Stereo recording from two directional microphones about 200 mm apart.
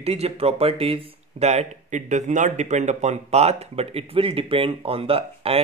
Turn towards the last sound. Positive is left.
turn(degrees=-30)  # may be behind; listen again after turning